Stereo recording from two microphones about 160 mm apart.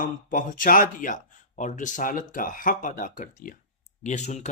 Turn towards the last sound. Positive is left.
turn(degrees=45)  # may be behind; listen again after turning